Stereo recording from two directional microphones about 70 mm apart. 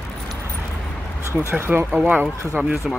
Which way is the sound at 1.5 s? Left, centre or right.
Right.